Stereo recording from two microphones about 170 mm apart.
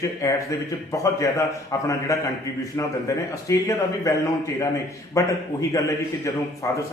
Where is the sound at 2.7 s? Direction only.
20° left (ahead or behind).